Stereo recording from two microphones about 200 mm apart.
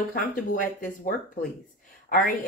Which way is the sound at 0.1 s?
45° left (ahead or behind).